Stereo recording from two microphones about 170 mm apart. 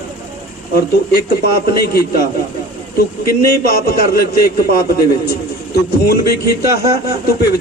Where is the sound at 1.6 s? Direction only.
65° left (ahead or behind).